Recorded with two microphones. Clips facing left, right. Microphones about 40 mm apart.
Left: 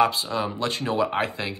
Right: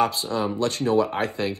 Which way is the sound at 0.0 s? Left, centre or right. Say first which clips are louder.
Left 1 dB; left.